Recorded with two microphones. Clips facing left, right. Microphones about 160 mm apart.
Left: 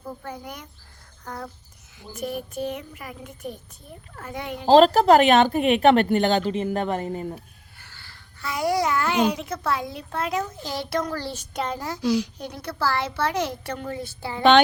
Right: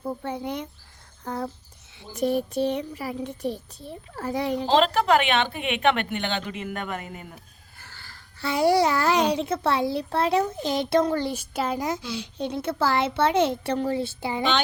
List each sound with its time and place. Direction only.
0.0 s a child's voice: 25° right (ahead or behind)
4.6 s speech: 40° left (ahead or behind)
7.8 s a sound: 45° right (ahead or behind)
8.4 s a child's voice: 30° right (ahead or behind)
11.5 s a child's voice: 5° right (ahead or behind)
12.1 s a child's voice: 25° right (ahead or behind)